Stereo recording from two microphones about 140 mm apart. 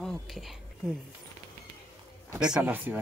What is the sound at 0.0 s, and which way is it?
Speech, centre (ahead or behind).